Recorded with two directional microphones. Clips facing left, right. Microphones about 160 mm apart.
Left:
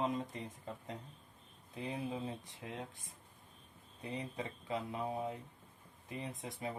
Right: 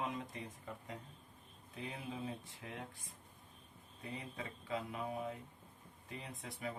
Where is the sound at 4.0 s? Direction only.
25° left (ahead or behind).